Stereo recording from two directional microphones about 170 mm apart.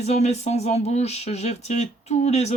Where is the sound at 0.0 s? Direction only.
40° left (ahead or behind).